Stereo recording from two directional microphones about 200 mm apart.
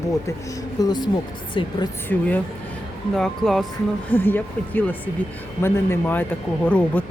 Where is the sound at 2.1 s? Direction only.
10° left (ahead or behind).